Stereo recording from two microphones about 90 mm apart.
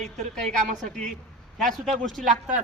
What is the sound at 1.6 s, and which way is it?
Speech, 5° left (ahead or behind).